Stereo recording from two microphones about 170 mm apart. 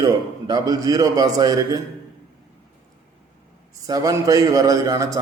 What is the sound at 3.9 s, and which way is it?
A man's voice, 20° right (ahead or behind).